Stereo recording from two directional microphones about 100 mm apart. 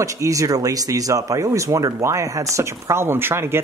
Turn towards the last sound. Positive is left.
turn(degrees=-25)  # may be behind; listen again after turning